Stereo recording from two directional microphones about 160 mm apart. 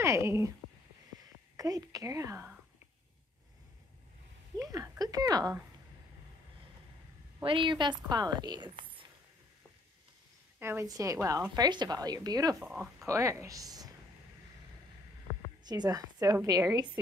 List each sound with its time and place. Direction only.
0.0 s speech: 15° right (ahead or behind)
1.6 s speech: 20° right (ahead or behind)
4.6 s a sound: 20° right (ahead or behind)
7.4 s a woman's voice: 30° right (ahead or behind)
10.6 s a woman's voice: 15° right (ahead or behind)
12.5 s speech: 5° right (ahead or behind)
13.0 s a woman's voice: 20° right (ahead or behind)
15.6 s a woman's voice: 25° right (ahead or behind)